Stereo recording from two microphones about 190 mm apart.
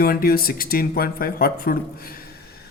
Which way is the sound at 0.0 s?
50° left (ahead or behind).